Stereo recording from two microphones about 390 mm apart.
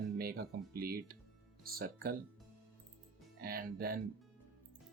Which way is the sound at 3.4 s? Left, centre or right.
Right.